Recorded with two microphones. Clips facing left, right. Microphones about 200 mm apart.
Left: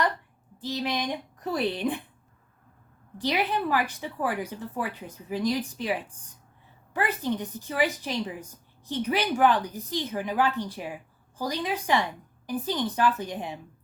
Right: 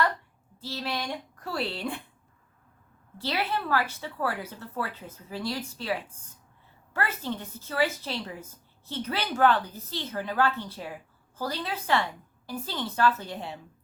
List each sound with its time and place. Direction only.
0.6 s a woman's voice: 15° left (ahead or behind)
3.2 s a woman's voice: 15° left (ahead or behind)